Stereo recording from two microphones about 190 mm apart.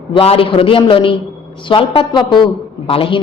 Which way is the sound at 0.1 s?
30° left (ahead or behind).